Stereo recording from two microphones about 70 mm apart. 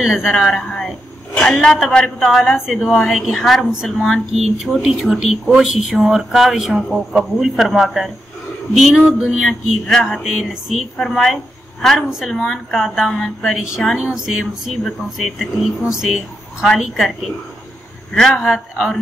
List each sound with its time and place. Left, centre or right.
0.0 s speech: centre
8.7 s a sound: centre
9.4 s speech: centre
13.9 s a sound: centre
14.9 s speech: centre
18.1 s a man's voice: centre
18.4 s speech: centre